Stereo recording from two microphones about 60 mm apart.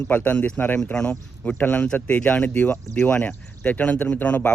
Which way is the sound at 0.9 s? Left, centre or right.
Centre.